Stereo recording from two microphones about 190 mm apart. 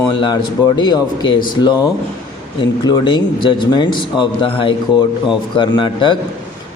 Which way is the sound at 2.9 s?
25° left (ahead or behind).